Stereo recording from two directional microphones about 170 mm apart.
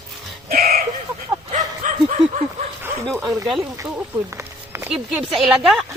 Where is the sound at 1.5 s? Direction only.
45° right (ahead or behind).